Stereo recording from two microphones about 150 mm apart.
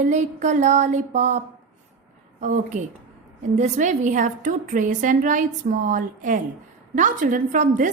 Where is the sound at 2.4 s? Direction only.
55° right (ahead or behind).